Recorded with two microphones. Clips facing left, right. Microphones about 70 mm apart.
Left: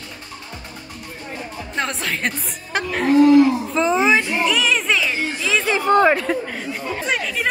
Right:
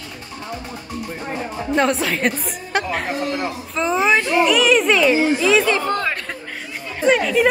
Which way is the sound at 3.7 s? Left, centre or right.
Centre.